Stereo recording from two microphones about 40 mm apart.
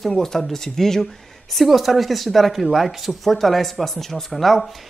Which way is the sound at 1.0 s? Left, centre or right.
Centre.